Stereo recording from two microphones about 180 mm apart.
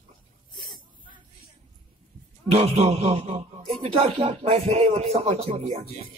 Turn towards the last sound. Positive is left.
turn(degrees=-40)  # may be behind; listen again after turning